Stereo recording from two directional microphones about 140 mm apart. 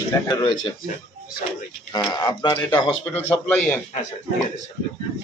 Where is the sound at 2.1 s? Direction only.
30° left (ahead or behind).